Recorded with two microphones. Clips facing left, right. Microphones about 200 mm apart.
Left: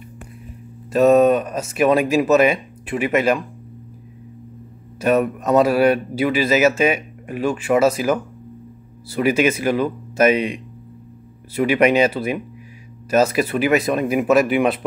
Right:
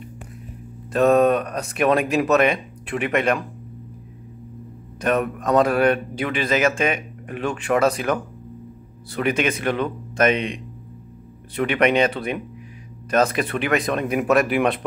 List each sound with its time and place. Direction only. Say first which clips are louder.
0.9 s speech: left 3 dB; centre (ahead or behind)
5.0 s speech: left 4 dB; 5° left (ahead or behind)